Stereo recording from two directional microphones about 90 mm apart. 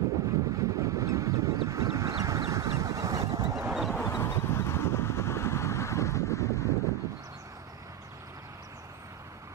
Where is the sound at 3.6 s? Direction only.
5° right (ahead or behind).